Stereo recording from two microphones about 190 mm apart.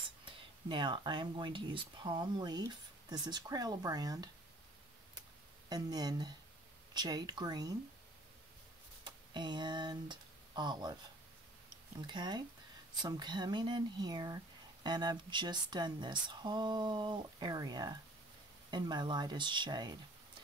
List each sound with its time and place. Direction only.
0.2 s speech: 25° right (ahead or behind)
5.7 s speech: 20° right (ahead or behind)
9.0 s speech: 25° right (ahead or behind)
12.1 s speech: 20° right (ahead or behind)